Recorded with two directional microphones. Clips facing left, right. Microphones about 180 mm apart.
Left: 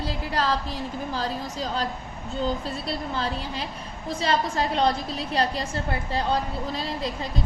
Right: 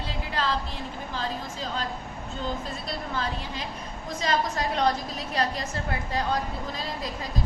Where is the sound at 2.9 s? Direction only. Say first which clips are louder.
Left 2 dB; 30° left (ahead or behind).